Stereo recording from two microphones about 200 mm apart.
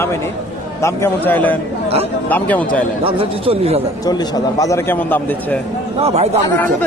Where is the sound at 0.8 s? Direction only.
10° left (ahead or behind).